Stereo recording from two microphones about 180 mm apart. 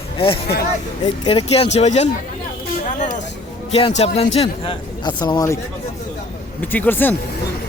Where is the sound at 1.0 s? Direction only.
30° left (ahead or behind).